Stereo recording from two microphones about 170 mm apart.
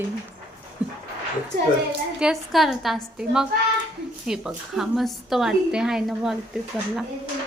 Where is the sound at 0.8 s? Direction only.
5° right (ahead or behind).